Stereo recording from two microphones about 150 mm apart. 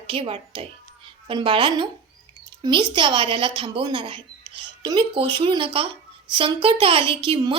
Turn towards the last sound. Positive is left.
turn(degrees=-35)  # may be behind; listen again after turning